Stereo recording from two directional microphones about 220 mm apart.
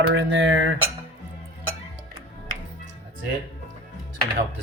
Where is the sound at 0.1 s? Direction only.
55° right (ahead or behind).